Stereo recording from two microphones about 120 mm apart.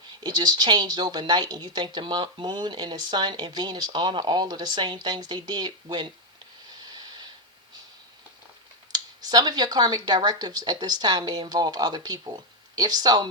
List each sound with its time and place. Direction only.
0.2 s speech: 35° right (ahead or behind)
6.8 s snort: 35° right (ahead or behind)
8.9 s speech: 35° right (ahead or behind)